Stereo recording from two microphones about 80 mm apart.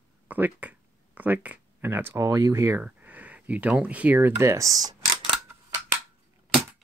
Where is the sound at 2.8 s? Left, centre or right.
Centre.